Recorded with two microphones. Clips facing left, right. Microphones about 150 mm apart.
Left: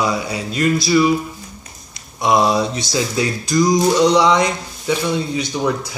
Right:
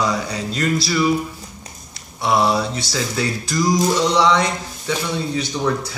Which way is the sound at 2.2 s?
15° left (ahead or behind).